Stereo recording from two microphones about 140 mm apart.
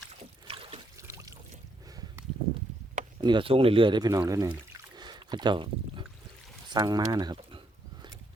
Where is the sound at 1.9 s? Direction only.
25° right (ahead or behind).